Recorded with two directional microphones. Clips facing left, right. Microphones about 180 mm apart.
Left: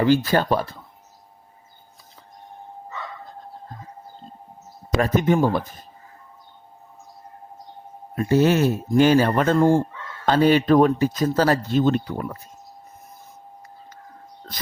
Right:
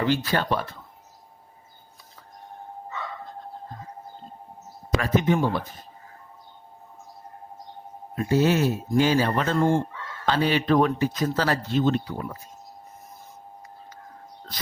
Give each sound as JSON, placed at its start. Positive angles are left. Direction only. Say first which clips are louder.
{"t": 0.0, "sound": "speech", "louder": "left 6 dB", "side_deg": 40}
{"t": 4.9, "sound": "speech", "louder": "left 3 dB", "side_deg": 45}
{"t": 8.1, "sound": "speech", "louder": "left 3 dB", "side_deg": 50}